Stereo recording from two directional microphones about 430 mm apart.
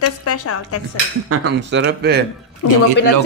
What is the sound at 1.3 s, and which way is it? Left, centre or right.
Speech, right.